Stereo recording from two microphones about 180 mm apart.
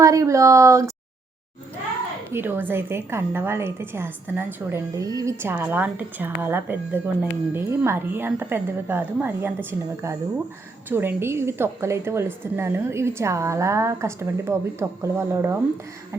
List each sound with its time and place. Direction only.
0.0 s a woman's voice: 20° right (ahead or behind)
2.3 s a woman's voice: 10° right (ahead or behind)